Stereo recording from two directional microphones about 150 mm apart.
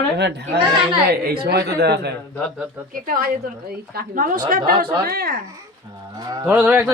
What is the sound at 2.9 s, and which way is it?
A woman's voice, 70° right (ahead or behind).